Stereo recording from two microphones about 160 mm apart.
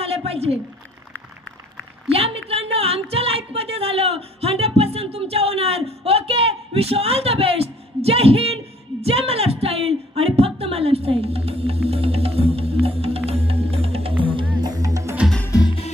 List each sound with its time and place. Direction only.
0.0 s a sound: 40° right (ahead or behind)
2.1 s speech: 40° right (ahead or behind)
11.9 s music: 40° right (ahead or behind); by 15.1 s 20° right (ahead or behind)
15.5 s music: 25° left (ahead or behind)